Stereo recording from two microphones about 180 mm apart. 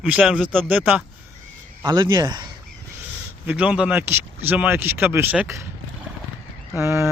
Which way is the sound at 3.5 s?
5° right (ahead or behind).